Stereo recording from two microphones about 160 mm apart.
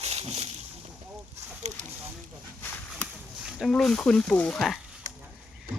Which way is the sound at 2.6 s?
5° left (ahead or behind).